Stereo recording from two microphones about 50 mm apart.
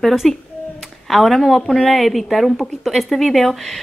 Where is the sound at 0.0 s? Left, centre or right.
Centre.